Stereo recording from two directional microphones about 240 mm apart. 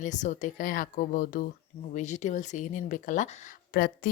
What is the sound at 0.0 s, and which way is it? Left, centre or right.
Speech, left.